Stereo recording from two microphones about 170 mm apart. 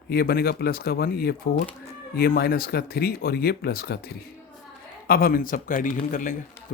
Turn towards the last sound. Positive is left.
turn(degrees=50)  # may be behind; listen again after turning